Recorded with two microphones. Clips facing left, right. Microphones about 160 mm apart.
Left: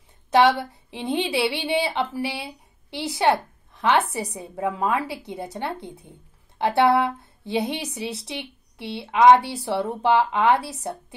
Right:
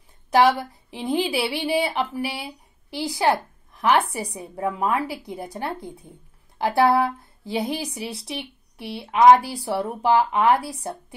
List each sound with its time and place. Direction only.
0.3 s a woman's voice: 25° left (ahead or behind)